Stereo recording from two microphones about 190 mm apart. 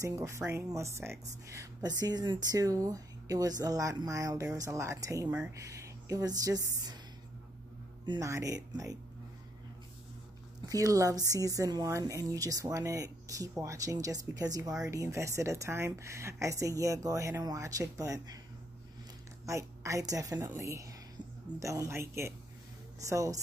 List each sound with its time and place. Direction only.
0.0 s speech: 15° right (ahead or behind)
8.0 s speech: 20° right (ahead or behind)
10.7 s speech: 15° right (ahead or behind)
19.4 s speech: 15° right (ahead or behind)